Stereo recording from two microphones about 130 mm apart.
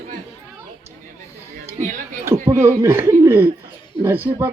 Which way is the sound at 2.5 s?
20° right (ahead or behind).